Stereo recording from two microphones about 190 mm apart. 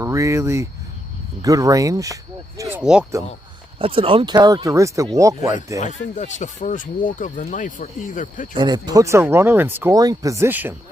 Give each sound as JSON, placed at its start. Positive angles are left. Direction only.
{"t": 0.0, "sound": "speech", "side_deg": -15}
{"t": 2.6, "sound": "a sound", "side_deg": -10}
{"t": 3.8, "sound": "speech", "side_deg": -30}
{"t": 6.1, "sound": "speech", "side_deg": 40}
{"t": 8.5, "sound": "speech", "side_deg": -20}